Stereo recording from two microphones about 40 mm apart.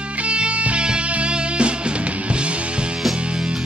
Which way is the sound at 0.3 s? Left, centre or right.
Right.